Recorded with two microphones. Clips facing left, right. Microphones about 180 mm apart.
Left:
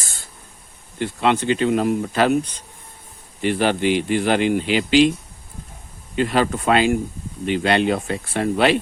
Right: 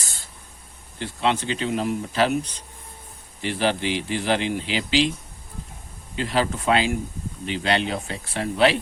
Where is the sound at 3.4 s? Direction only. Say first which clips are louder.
Left 5 dB; 55° left (ahead or behind).